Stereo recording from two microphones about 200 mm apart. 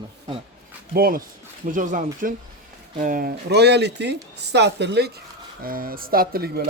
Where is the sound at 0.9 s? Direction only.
45° right (ahead or behind).